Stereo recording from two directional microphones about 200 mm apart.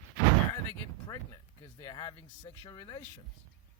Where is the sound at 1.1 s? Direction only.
20° left (ahead or behind).